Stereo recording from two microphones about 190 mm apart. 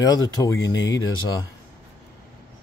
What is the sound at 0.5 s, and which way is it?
Speech, 85° left.